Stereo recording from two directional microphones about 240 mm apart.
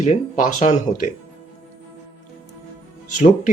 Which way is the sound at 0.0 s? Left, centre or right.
Left.